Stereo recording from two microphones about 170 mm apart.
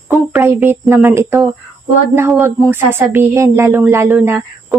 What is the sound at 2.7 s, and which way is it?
Speech, 15° right (ahead or behind).